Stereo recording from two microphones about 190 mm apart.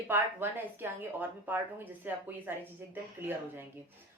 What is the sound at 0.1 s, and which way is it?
A woman's voice, 10° right (ahead or behind).